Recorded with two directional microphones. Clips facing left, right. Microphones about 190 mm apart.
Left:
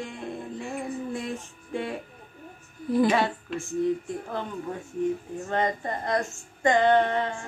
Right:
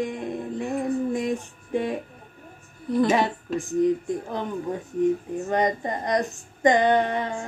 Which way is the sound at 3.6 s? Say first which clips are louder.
Right 4 dB; 15° right (ahead or behind).